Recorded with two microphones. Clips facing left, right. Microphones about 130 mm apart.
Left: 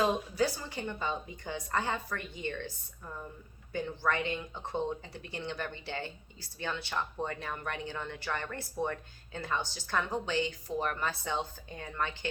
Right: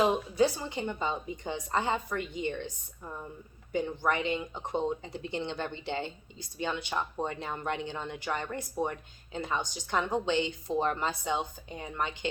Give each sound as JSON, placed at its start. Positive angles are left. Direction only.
{"t": 0.0, "sound": "speech", "side_deg": -20}